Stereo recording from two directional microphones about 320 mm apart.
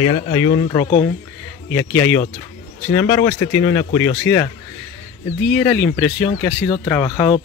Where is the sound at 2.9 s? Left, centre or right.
Centre.